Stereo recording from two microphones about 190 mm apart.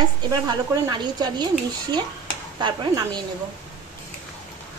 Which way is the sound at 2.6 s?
25° right (ahead or behind).